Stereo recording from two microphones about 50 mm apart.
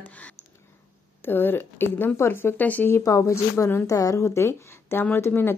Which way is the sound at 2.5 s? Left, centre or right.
Left.